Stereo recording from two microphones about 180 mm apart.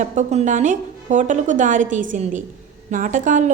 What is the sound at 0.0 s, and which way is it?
A woman's voice, 40° right (ahead or behind).